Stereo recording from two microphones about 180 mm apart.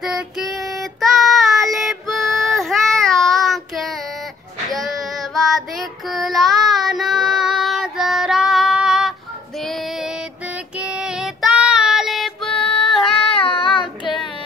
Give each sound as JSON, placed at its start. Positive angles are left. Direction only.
{"t": 0.0, "sound": "child singing", "side_deg": 0}
{"t": 10.8, "sound": "child singing", "side_deg": -5}
{"t": 13.3, "sound": "child singing", "side_deg": 30}